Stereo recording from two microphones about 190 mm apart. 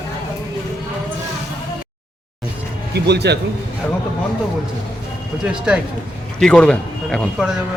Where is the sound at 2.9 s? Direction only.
60° right (ahead or behind).